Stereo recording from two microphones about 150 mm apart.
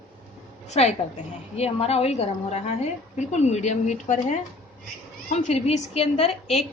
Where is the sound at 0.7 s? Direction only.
50° left (ahead or behind).